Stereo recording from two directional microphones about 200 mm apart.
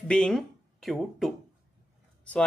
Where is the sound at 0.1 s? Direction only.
5° left (ahead or behind).